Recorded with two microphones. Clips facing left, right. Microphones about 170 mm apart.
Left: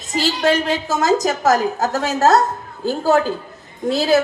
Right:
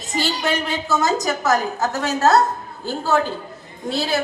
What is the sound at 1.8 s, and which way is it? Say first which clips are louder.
Speech: left 2 dB; 40° left (ahead or behind).